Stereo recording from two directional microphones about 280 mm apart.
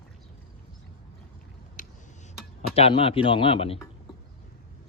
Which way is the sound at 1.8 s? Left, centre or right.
Left.